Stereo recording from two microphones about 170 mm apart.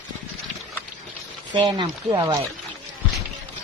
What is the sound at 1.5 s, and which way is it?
Speech, 25° right (ahead or behind).